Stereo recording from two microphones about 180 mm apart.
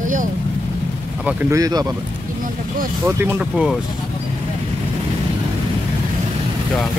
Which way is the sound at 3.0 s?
10° right (ahead or behind).